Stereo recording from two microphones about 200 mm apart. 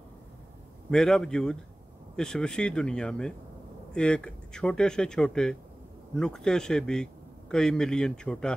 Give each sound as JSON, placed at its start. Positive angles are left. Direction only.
{"t": 0.8, "sound": "a man's voice", "side_deg": 5}